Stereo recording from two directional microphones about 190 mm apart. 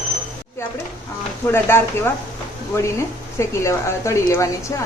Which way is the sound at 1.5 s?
15° left (ahead or behind).